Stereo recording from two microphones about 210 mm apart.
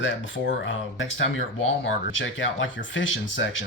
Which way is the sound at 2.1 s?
65° left (ahead or behind).